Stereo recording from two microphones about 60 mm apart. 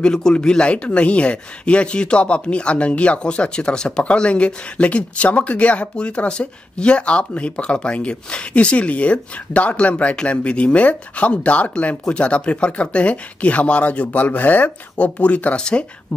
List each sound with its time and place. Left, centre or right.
0.0 s speech: centre